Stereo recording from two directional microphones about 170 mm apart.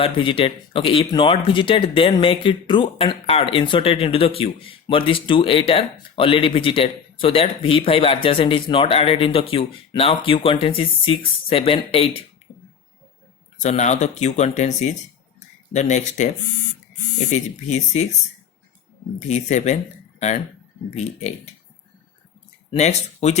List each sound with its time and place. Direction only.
0.0 s speech: 30° left (ahead or behind)
13.6 s speech: 45° left (ahead or behind)
19.3 s speech: 45° left (ahead or behind)
22.7 s speech: 40° left (ahead or behind)